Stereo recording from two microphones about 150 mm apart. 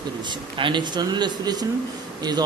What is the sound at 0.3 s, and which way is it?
Speech, 30° right (ahead or behind).